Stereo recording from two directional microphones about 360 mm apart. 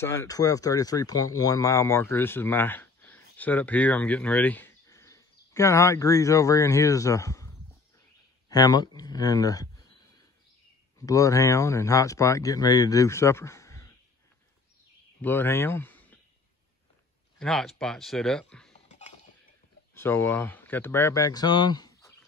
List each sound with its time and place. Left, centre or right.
0.0 s speech: centre
8.5 s speech: centre
11.0 s speech: centre
15.2 s speech: centre
17.4 s speech: centre
18.9 s dishes: centre
19.9 s speech: centre